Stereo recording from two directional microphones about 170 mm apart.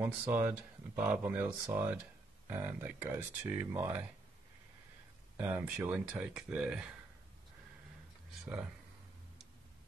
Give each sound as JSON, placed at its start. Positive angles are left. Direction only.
{"t": 0.0, "sound": "speech", "side_deg": -15}
{"t": 5.4, "sound": "speech", "side_deg": -10}